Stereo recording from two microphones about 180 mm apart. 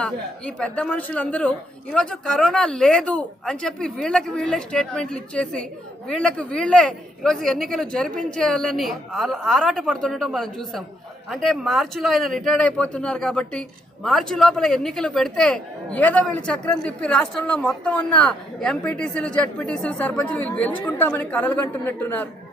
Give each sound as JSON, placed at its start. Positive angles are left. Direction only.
{"t": 0.0, "sound": "a woman's voice", "side_deg": 5}